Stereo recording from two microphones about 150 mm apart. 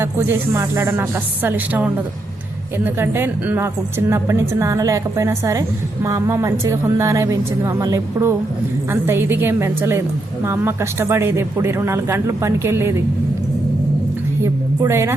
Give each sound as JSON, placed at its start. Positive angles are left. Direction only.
{"t": 0.0, "sound": "a woman's voice", "side_deg": -15}
{"t": 14.4, "sound": "a woman's voice", "side_deg": -15}